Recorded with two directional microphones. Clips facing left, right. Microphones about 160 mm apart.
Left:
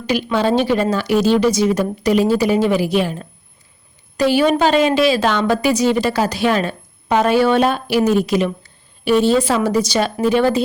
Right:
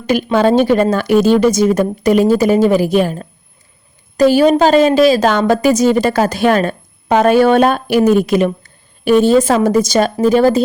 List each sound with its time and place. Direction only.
0.1 s a woman's voice: 50° right (ahead or behind)